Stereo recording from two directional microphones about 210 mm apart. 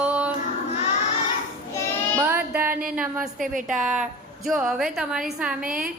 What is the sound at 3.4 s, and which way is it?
Speech, 40° right (ahead or behind).